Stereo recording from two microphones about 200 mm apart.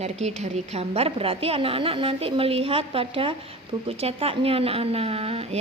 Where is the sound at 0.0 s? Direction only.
35° right (ahead or behind).